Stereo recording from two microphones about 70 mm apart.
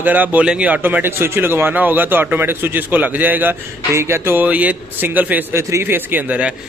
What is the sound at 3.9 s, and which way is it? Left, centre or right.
Speech, right.